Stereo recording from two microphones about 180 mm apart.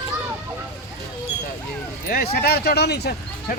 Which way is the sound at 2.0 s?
60° left (ahead or behind).